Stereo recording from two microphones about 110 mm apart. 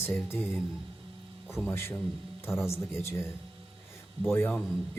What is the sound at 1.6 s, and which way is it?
Speech, 20° left (ahead or behind).